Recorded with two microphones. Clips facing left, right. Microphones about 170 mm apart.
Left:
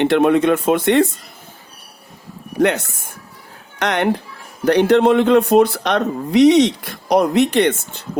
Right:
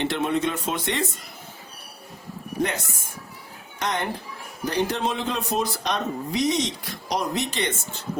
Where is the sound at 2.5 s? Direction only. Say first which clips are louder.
Left 10 dB; 65° left (ahead or behind).